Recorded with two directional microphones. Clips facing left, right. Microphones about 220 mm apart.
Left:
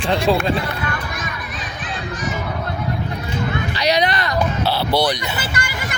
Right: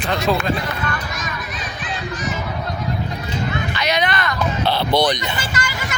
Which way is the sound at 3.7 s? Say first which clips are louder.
Left 4 dB; 35° left (ahead or behind).